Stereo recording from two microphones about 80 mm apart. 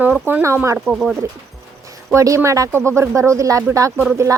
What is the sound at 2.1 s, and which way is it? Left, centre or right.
Speech, right.